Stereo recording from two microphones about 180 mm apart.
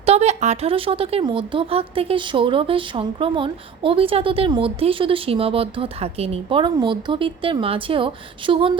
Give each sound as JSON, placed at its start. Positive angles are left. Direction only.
{"t": 0.0, "sound": "speech", "side_deg": -35}